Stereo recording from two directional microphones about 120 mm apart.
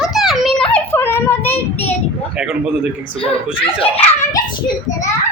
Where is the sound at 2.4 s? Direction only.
5° right (ahead or behind).